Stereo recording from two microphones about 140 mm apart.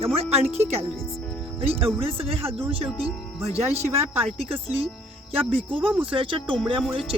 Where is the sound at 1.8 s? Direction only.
40° right (ahead or behind).